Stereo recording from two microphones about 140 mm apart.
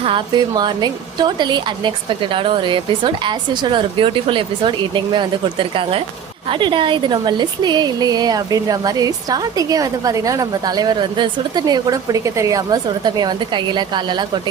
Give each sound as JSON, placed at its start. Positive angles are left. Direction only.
{"t": 0.0, "sound": "a woman's voice", "side_deg": -35}